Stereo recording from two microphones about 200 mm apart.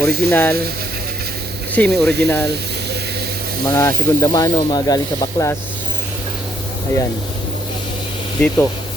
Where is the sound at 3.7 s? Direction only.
15° left (ahead or behind).